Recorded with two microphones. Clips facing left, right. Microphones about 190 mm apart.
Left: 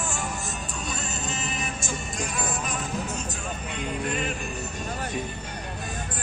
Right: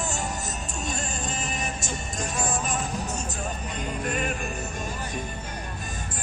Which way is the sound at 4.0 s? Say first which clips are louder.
Right 1 dB; 50° right (ahead or behind).